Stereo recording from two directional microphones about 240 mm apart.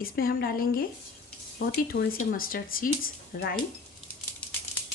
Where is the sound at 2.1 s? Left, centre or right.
Left.